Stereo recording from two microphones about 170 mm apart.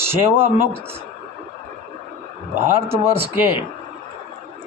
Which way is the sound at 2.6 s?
15° right (ahead or behind).